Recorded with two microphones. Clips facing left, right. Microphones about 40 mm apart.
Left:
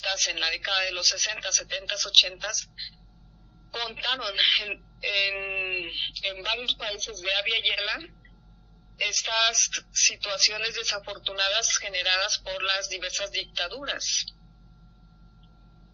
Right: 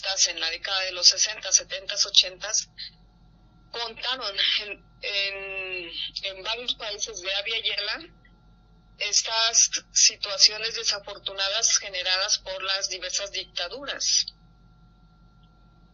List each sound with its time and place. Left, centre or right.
0.0 s a sound: left
0.3 s a man's voice: left
6.9 s a man's voice: centre